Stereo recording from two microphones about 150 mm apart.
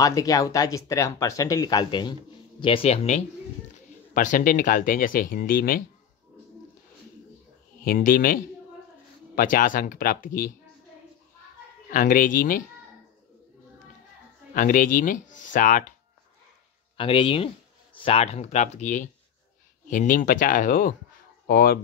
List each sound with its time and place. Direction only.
0.0 s a man's voice: 25° left (ahead or behind); by 3.2 s 40° left (ahead or behind)
4.1 s speech: 60° left (ahead or behind)
7.8 s speech: 70° left (ahead or behind)
11.9 s speech: 60° left (ahead or behind)
14.5 s speech: 60° left (ahead or behind)
16.9 s a man's voice: 40° left (ahead or behind); by 20.9 s 65° left (ahead or behind)
21.5 s speech: 75° left (ahead or behind)